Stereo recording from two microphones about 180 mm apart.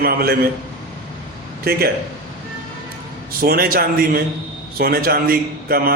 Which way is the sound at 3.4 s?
55° right (ahead or behind).